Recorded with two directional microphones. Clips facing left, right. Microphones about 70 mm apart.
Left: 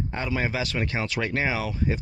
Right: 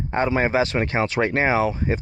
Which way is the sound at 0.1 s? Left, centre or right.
Right.